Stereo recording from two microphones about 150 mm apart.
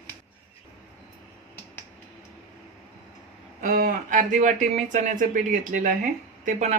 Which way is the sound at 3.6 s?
65° right (ahead or behind).